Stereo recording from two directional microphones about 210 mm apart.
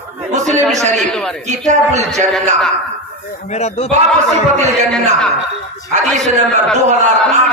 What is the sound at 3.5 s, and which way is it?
Speech, 30° left (ahead or behind).